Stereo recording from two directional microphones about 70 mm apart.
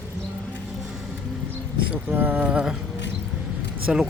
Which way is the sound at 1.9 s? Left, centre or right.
Right.